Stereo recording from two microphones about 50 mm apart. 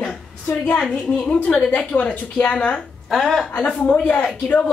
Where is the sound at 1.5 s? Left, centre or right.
Left.